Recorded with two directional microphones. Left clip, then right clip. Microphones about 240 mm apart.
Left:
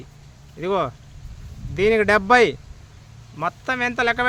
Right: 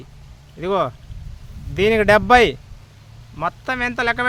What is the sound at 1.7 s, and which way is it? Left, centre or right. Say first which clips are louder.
Speech: right 3 dB; right.